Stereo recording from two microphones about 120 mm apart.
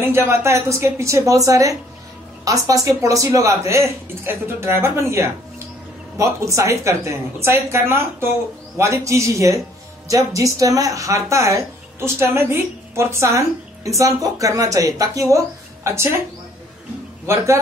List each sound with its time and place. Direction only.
0.0 s speech: 20° right (ahead or behind)
17.3 s speech: 20° right (ahead or behind)